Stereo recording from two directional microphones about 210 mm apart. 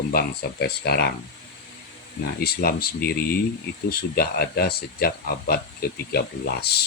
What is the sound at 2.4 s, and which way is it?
Speech, 45° left (ahead or behind).